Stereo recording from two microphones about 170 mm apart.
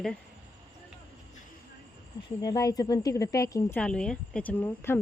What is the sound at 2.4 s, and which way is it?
Speech, 20° left (ahead or behind).